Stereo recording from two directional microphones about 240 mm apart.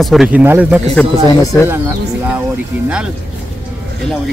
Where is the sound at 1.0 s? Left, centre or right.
Centre.